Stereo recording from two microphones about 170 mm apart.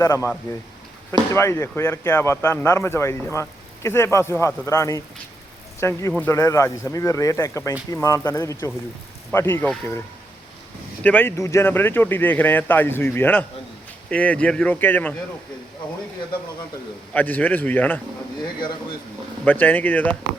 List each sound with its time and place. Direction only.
0.0 s speech: 15° left (ahead or behind)
11.0 s speech: 10° left (ahead or behind)
17.2 s speech: 10° left (ahead or behind)
19.5 s speech: 10° left (ahead or behind)